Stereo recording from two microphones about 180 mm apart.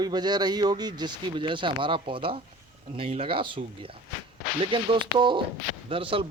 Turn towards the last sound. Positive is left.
turn(degrees=-30)  # may be behind; listen again after turning